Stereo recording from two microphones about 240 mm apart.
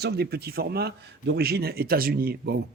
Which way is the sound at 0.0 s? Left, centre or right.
Right.